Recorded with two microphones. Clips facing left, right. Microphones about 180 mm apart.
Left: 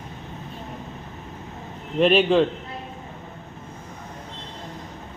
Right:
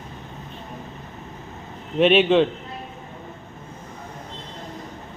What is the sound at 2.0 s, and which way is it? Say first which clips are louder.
Speech: right 1 dB; centre (ahead or behind).